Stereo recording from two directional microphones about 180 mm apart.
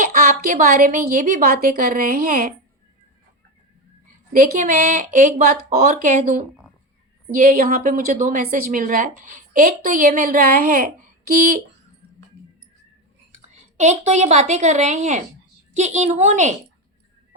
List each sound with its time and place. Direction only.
0.0 s a woman's voice: 50° right (ahead or behind)
4.3 s a woman's voice: 50° right (ahead or behind)
13.3 s a woman's voice: 40° right (ahead or behind)